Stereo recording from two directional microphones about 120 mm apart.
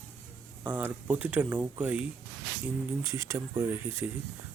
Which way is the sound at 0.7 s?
15° right (ahead or behind).